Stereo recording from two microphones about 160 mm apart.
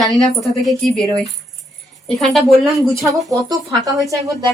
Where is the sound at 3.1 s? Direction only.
20° right (ahead or behind).